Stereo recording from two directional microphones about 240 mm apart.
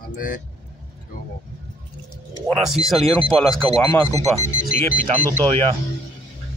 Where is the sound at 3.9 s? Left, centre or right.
Centre.